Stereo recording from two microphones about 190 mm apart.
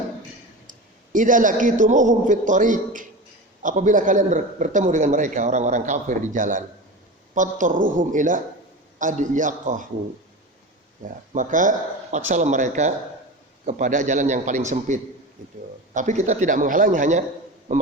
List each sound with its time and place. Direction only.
0.7 s a man's voice: 45° right (ahead or behind)
11.0 s a woman's voice: 40° right (ahead or behind)